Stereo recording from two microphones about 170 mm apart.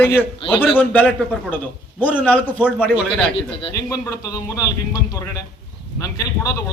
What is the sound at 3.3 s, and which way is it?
Speech, 30° left (ahead or behind).